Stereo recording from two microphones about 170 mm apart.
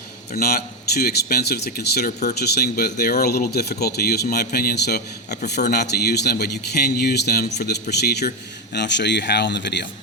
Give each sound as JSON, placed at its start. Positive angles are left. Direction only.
{"t": 0.3, "sound": "speech", "side_deg": 65}